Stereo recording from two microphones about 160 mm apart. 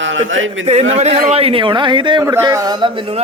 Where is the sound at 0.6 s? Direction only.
40° right (ahead or behind).